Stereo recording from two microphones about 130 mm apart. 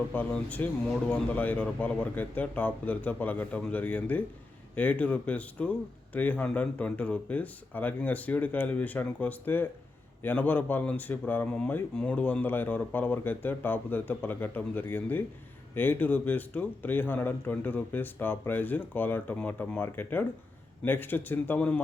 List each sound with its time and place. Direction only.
0.1 s speech: 15° left (ahead or behind)